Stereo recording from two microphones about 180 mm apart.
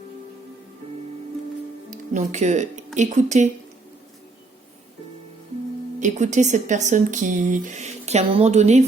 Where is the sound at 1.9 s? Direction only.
40° right (ahead or behind).